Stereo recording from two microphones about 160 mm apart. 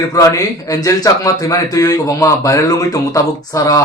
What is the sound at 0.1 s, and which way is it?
A man's voice, 20° left (ahead or behind).